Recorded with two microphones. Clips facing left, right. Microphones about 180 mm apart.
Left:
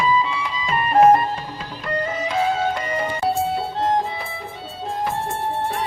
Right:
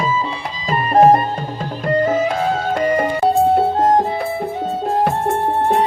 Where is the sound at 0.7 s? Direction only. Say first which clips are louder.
Right 3 dB; 35° right (ahead or behind).